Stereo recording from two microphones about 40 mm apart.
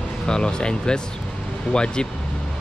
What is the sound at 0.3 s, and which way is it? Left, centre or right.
Speech, left.